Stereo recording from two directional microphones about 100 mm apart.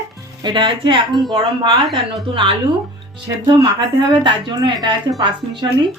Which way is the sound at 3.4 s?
45° right (ahead or behind).